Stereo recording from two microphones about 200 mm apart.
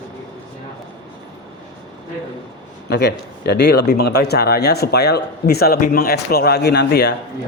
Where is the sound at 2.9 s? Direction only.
55° left (ahead or behind).